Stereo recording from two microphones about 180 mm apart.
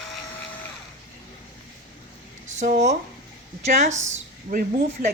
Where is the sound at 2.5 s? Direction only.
45° right (ahead or behind).